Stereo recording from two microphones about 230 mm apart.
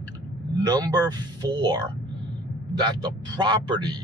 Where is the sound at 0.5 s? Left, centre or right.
Centre.